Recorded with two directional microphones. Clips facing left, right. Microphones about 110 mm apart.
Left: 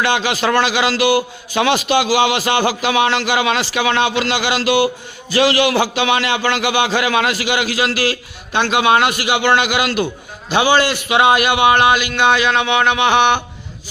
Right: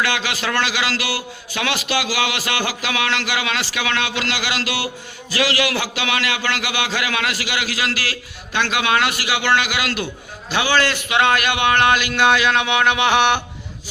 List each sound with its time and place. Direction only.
0.0 s a man's voice: 25° left (ahead or behind); by 13.4 s centre (ahead or behind)